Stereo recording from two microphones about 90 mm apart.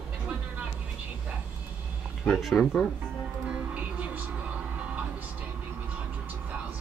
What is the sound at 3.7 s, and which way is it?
Music, 15° right (ahead or behind).